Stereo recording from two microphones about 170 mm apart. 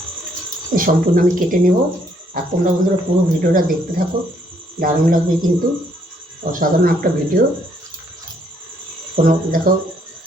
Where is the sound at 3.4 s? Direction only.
55° right (ahead or behind).